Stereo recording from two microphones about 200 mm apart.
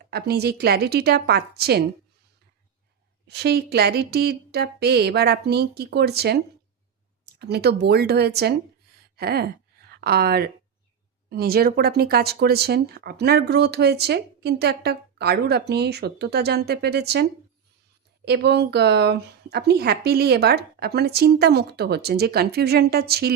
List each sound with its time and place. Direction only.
0.1 s speech: 50° right (ahead or behind)
3.2 s speech: 55° right (ahead or behind)
9.1 s gasp: 50° right (ahead or behind)
10.0 s speech: 50° right (ahead or behind)
18.3 s speech: 55° right (ahead or behind)